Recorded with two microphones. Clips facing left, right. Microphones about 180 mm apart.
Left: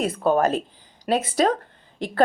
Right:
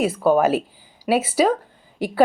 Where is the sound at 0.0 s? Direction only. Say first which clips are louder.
Right 3 dB; 5° right (ahead or behind).